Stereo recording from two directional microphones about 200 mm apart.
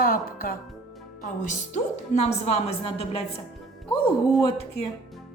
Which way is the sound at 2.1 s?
30° left (ahead or behind).